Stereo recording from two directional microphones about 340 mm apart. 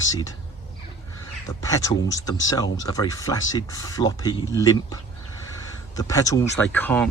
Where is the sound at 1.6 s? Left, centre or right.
Centre.